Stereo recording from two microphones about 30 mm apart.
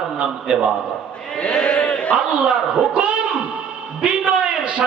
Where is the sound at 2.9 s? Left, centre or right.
Right.